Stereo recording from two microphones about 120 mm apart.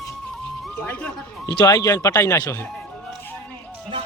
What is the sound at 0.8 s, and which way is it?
Speech, 15° left (ahead or behind).